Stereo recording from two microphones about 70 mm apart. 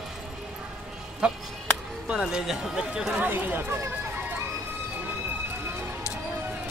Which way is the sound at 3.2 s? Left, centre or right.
Right.